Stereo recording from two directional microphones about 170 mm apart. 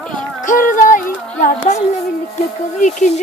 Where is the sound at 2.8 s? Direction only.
45° left (ahead or behind).